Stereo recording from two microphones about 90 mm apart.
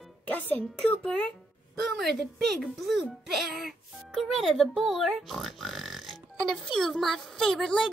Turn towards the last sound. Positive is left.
turn(degrees=5)  # may be behind; listen again after turning